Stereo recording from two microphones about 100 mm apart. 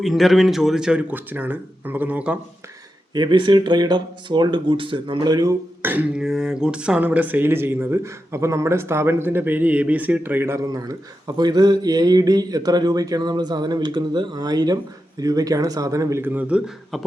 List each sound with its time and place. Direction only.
0.0 s speech: centre (ahead or behind)
3.2 s speech: 50° right (ahead or behind)
5.8 s speech: 15° right (ahead or behind)
6.2 s speech: 5° right (ahead or behind); by 10.7 s 25° right (ahead or behind)
10.7 s speech: 40° right (ahead or behind)
16.2 s speech: 15° right (ahead or behind)